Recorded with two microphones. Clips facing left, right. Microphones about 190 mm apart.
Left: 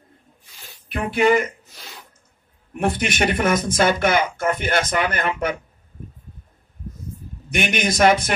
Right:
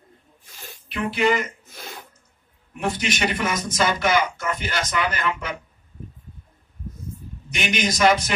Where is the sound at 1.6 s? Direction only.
50° right (ahead or behind).